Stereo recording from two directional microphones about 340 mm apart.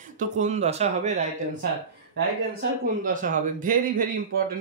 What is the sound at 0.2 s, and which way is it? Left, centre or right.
Speech, centre.